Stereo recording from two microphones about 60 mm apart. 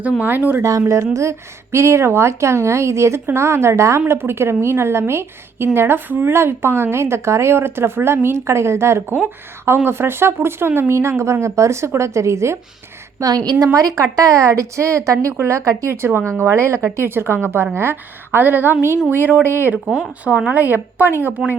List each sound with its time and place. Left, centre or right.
0.0 s a woman's voice: right
0.6 s a woman's voice: right
4.0 s a woman's voice: right
13.1 s a woman's voice: right
13.7 s speech: right
15.4 s a woman's voice: right